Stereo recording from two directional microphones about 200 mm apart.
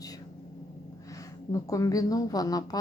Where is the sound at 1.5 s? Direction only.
15° left (ahead or behind).